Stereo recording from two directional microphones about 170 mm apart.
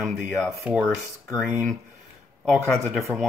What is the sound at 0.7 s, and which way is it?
Speech, centre (ahead or behind).